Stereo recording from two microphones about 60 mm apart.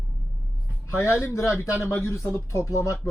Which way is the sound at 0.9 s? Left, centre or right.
Left.